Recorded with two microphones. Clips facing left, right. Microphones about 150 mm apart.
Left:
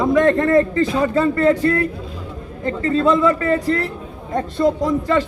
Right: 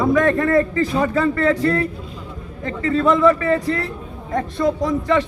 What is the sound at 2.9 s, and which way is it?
A man's voice, 25° left (ahead or behind).